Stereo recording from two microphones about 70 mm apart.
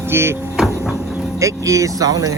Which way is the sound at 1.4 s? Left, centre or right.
Right.